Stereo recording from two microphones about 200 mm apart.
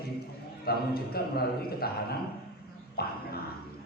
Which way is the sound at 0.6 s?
50° left (ahead or behind).